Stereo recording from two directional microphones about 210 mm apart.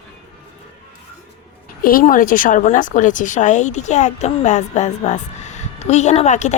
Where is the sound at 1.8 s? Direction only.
40° left (ahead or behind).